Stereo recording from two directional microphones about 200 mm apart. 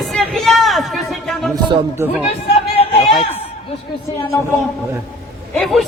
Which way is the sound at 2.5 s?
30° left (ahead or behind).